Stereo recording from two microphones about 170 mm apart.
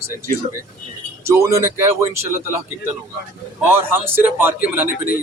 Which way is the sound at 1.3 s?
15° right (ahead or behind).